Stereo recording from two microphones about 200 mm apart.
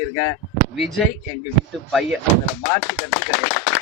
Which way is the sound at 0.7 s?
Centre (ahead or behind).